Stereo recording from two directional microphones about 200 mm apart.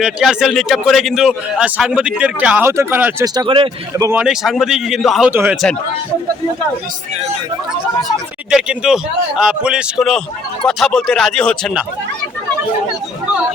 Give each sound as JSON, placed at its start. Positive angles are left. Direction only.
{"t": 0.0, "sound": "a man's voice", "side_deg": 0}
{"t": 3.4, "sound": "speech", "side_deg": -25}
{"t": 4.2, "sound": "a man's voice", "side_deg": 0}
{"t": 8.0, "sound": "a man's voice", "side_deg": 0}